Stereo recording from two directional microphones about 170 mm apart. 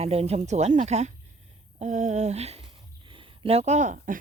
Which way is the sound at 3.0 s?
30° right (ahead or behind).